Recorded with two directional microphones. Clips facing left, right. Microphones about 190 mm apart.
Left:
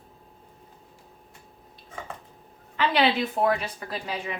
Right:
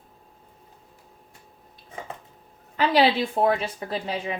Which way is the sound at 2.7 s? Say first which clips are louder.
Right 3 dB; 35° right (ahead or behind).